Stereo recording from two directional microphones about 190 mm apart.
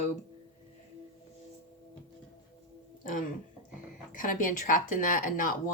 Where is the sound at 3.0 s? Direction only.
45° left (ahead or behind).